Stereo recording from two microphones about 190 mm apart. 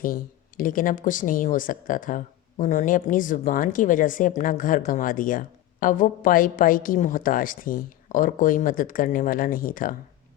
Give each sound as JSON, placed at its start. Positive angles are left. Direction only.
{"t": 0.0, "sound": "speech", "side_deg": 45}